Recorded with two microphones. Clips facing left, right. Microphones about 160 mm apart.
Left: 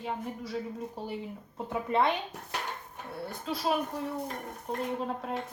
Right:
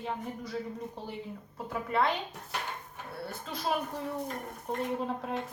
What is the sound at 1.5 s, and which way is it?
Speech, 20° left (ahead or behind).